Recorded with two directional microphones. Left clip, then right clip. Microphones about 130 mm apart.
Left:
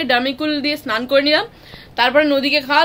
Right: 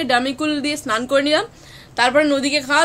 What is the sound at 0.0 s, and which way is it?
A woman's voice, 20° right (ahead or behind).